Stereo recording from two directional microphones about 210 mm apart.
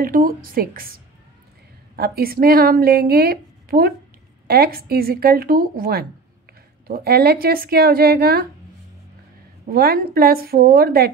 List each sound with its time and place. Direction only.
0.0 s a woman's voice: 40° right (ahead or behind)
2.0 s a woman's voice: 45° right (ahead or behind)
9.7 s a woman's voice: 45° right (ahead or behind)